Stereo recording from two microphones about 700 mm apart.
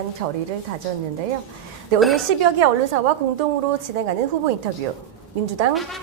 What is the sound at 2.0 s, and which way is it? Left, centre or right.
Speech, centre.